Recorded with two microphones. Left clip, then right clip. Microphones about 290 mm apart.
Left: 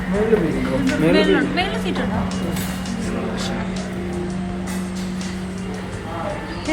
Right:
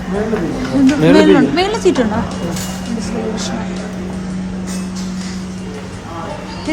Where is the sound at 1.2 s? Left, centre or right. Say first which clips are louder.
Right 7 dB; centre.